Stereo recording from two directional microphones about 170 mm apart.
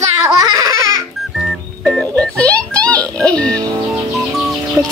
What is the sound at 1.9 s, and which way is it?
Music, 5° left (ahead or behind).